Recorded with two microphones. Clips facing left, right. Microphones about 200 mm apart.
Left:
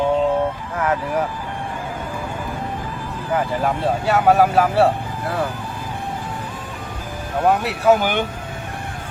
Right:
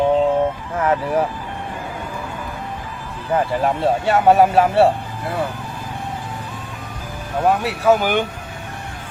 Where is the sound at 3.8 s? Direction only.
25° right (ahead or behind).